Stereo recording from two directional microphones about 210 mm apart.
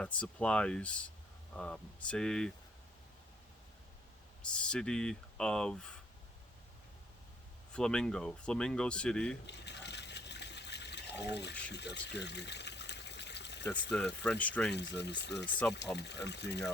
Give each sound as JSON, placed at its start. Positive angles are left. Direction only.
{"t": 0.0, "sound": "speech", "side_deg": 5}
{"t": 4.4, "sound": "speech", "side_deg": 5}
{"t": 7.7, "sound": "speech", "side_deg": 5}
{"t": 9.5, "sound": "water", "side_deg": 55}
{"t": 13.9, "sound": "speech", "side_deg": 5}
{"t": 14.7, "sound": "speech", "side_deg": 55}